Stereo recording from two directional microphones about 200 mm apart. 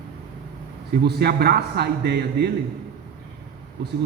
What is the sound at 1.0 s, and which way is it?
A man's voice, 50° right (ahead or behind).